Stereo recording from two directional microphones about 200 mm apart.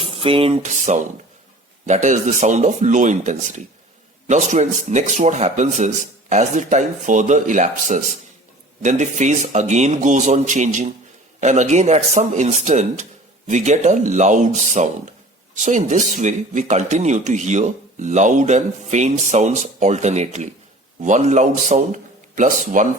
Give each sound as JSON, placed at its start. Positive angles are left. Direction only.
{"t": 0.0, "sound": "speech", "side_deg": -30}